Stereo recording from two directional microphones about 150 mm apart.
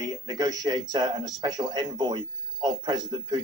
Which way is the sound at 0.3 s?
25° right (ahead or behind).